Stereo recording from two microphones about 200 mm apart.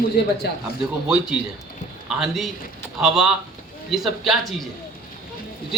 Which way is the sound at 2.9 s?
5° right (ahead or behind).